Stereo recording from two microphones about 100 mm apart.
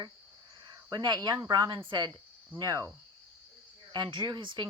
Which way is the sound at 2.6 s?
35° right (ahead or behind).